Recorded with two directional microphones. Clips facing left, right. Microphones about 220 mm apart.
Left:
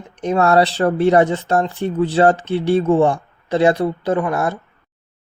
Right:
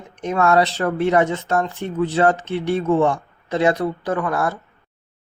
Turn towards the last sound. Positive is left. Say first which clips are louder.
# left 3 dB
turn(degrees=20)  # may be behind; listen again after turning